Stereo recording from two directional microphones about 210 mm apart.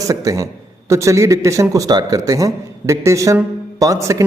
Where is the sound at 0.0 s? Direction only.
15° right (ahead or behind).